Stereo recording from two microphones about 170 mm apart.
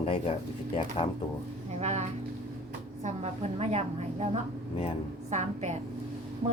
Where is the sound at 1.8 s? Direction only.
40° right (ahead or behind).